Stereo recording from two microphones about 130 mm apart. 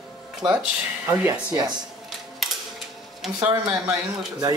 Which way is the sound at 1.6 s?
35° right (ahead or behind).